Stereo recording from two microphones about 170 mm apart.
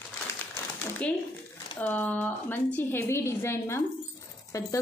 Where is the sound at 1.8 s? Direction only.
10° left (ahead or behind).